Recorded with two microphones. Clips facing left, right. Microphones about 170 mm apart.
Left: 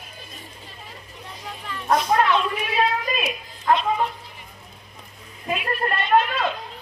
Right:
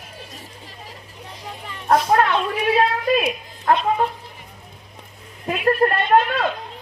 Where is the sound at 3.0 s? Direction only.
60° right (ahead or behind).